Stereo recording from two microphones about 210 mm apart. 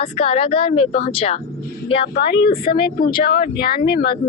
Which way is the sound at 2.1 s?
50° left (ahead or behind).